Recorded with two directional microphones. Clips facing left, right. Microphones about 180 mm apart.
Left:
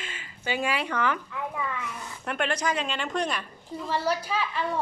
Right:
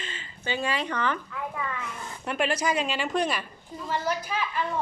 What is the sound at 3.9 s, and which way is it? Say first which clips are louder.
Speech: left 1 dB; 35° left (ahead or behind).